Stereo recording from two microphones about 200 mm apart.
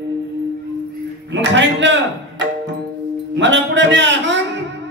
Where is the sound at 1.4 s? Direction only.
65° right (ahead or behind).